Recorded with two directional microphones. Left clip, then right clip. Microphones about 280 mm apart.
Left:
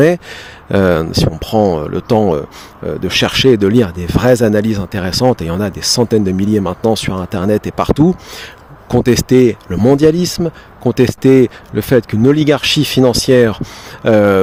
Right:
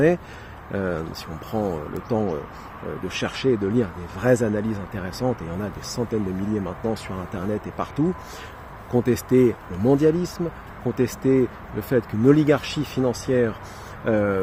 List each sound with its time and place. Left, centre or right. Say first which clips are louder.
0.7 s speech: left 15 dB; left